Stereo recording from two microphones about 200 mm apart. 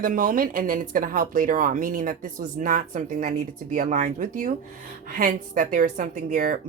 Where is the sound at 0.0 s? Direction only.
40° right (ahead or behind).